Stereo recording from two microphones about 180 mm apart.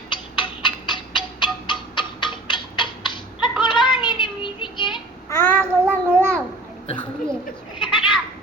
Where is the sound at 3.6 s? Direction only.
25° left (ahead or behind).